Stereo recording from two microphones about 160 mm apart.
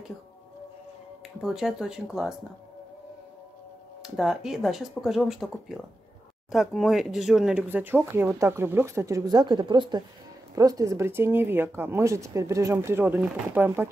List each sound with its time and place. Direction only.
1.4 s speech: centre (ahead or behind)
4.0 s speech: centre (ahead or behind)
6.5 s speech: centre (ahead or behind)